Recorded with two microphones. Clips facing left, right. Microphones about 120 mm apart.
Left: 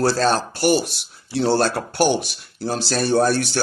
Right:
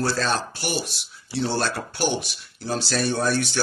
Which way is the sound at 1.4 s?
55° left (ahead or behind).